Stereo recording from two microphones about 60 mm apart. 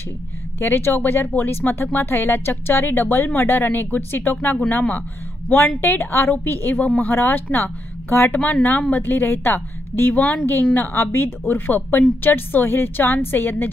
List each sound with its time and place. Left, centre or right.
0.6 s a woman's voice: left
5.8 s a woman's voice: left